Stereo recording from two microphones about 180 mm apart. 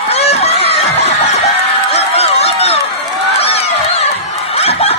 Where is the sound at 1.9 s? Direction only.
35° left (ahead or behind).